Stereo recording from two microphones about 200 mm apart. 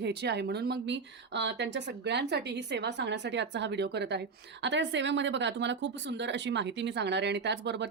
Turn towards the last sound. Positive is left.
turn(degrees=-60)  # may be behind; listen again after turning